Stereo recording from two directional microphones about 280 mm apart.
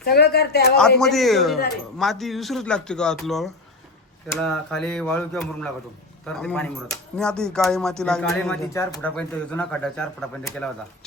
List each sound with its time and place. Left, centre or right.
0.0 s speech: left
0.8 s speech: centre